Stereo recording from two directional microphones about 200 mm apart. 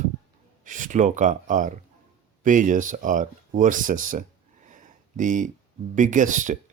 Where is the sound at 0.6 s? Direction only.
40° right (ahead or behind).